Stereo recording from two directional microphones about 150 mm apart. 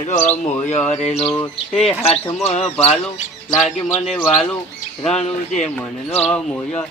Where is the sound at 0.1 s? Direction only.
55° left (ahead or behind).